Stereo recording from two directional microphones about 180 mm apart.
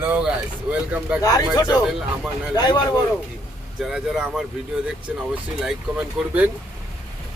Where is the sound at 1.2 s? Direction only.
20° left (ahead or behind).